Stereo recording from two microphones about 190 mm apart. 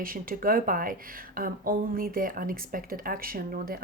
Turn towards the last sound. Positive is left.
turn(degrees=-50)  # may be behind; listen again after turning